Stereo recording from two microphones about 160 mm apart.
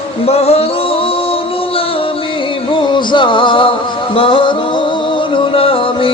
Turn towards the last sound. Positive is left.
turn(degrees=35)  # may be behind; listen again after turning